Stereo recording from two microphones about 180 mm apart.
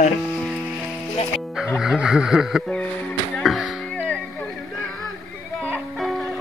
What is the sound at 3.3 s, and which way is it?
Music, centre (ahead or behind).